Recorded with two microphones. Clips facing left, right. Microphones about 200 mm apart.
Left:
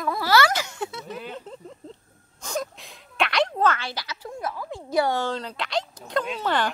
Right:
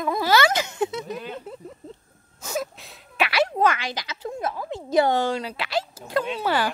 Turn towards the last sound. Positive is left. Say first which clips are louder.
# right 1 dB
turn(degrees=-5)  # may be behind; listen again after turning